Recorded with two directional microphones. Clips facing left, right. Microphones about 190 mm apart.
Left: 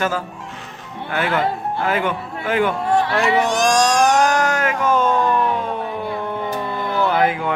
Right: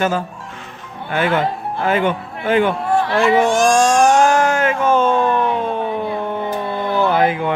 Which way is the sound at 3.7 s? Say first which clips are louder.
Right 3 dB; 50° right (ahead or behind).